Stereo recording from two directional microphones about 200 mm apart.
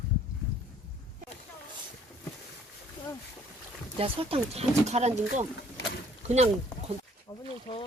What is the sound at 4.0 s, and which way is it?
Speech, 30° right (ahead or behind).